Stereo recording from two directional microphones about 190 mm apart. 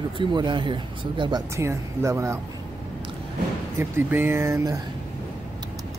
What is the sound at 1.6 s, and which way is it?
Speech, 15° right (ahead or behind).